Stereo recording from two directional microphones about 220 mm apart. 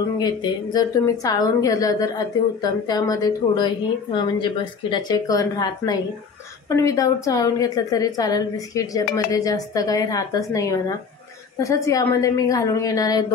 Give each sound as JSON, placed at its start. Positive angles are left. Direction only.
{"t": 0.2, "sound": "a woman's voice", "side_deg": 20}